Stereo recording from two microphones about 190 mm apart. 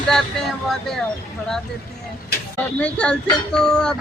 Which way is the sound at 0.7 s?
Centre (ahead or behind).